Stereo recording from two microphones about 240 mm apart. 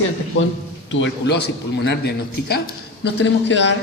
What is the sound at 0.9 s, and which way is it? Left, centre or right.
A man's voice, left.